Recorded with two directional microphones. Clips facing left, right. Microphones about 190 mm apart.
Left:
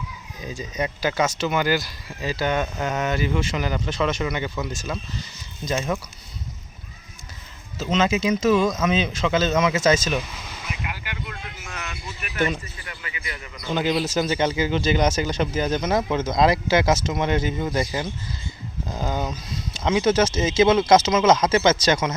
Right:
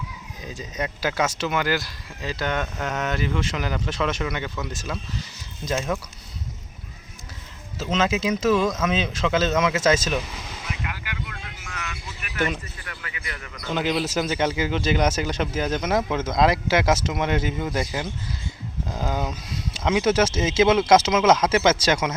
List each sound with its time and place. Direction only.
0.4 s speech: centre (ahead or behind)
7.8 s speech: 5° right (ahead or behind)
11.0 s vehicle: 25° left (ahead or behind)
12.8 s basketball bounce: 15° left (ahead or behind)
13.2 s a man's voice: 15° left (ahead or behind)
13.7 s speech: 5° left (ahead or behind)